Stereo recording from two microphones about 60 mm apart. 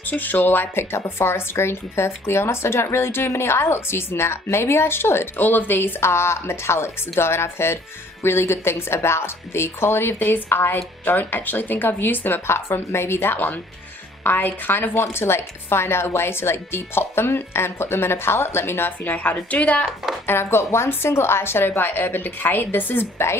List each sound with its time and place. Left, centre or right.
0.0 s speech: left
20.2 s speech: left